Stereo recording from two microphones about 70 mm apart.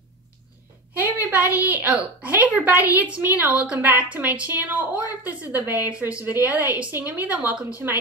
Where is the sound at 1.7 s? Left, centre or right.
Right.